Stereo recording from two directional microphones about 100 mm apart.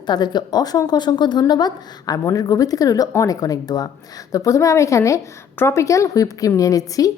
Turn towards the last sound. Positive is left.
turn(degrees=35)  # may be behind; listen again after turning